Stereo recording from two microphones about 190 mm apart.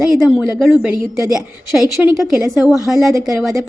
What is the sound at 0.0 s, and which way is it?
A woman's voice, centre (ahead or behind).